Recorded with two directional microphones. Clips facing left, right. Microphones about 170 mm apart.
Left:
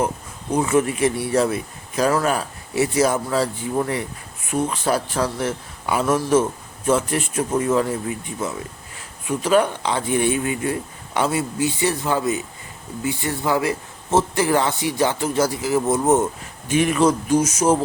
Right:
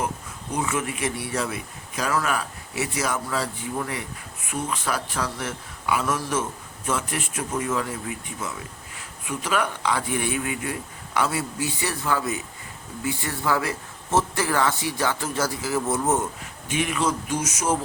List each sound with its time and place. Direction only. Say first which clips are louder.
0.5 s a man's voice: left 8 dB; 35° left (ahead or behind)
16.6 s a man's voice: left 7 dB; 40° left (ahead or behind)